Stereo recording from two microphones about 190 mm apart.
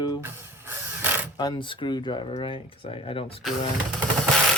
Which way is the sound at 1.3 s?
20° left (ahead or behind).